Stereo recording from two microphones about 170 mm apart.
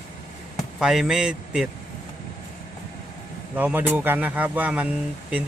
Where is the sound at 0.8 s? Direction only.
5° right (ahead or behind).